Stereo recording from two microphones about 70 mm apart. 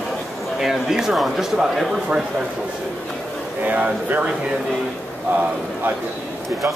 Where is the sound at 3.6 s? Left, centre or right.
Right.